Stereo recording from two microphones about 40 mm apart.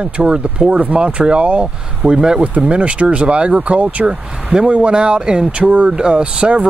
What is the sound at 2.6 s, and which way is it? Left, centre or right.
Speech, right.